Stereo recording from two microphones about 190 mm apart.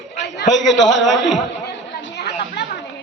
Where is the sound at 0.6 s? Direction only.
70° left (ahead or behind).